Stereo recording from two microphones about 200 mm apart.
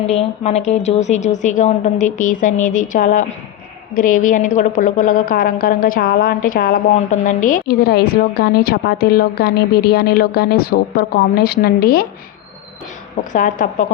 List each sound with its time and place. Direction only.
0.0 s a woman's voice: 30° left (ahead or behind); by 12.0 s 50° left (ahead or behind)
13.3 s a woman's voice: 40° left (ahead or behind)